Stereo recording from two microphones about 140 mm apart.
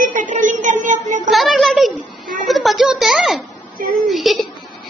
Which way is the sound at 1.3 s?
Centre (ahead or behind).